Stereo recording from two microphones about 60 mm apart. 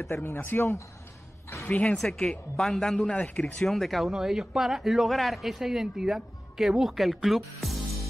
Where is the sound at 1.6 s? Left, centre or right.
Left.